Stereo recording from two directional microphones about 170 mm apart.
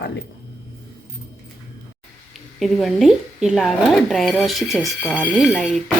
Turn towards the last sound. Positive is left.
turn(degrees=-5)  # may be behind; listen again after turning